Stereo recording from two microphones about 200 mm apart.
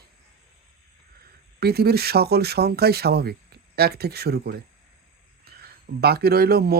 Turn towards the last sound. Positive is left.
turn(degrees=-50)  # may be behind; listen again after turning